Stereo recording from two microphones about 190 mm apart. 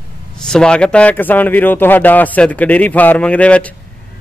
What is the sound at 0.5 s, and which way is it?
A man's voice, 5° left (ahead or behind).